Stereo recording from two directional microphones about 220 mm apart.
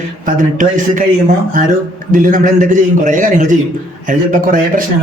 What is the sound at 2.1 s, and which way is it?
Speech, 35° right (ahead or behind).